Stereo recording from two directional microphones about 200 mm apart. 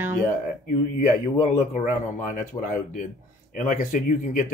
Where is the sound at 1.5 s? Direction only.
35° left (ahead or behind).